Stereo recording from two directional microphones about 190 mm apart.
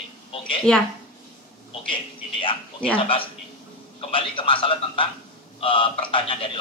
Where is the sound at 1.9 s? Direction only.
25° left (ahead or behind).